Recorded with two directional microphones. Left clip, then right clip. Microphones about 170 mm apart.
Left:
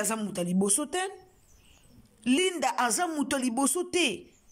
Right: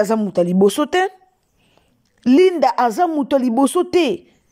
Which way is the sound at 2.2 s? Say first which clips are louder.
Right 14 dB; 30° right (ahead or behind).